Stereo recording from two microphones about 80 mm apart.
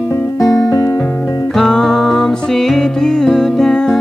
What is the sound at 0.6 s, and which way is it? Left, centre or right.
Music, left.